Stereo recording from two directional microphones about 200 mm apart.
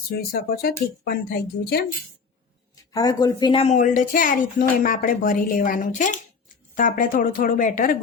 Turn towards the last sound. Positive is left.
turn(degrees=45)  # may be behind; listen again after turning